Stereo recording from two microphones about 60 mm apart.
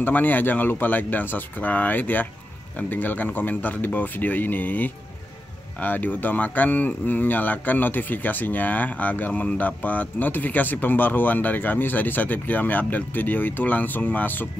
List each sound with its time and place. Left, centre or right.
0.0 s speech: left